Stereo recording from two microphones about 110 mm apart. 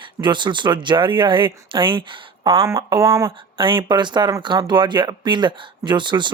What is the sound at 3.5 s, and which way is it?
Speech, 50° right (ahead or behind).